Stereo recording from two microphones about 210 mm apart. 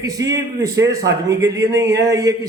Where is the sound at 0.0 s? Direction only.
15° right (ahead or behind).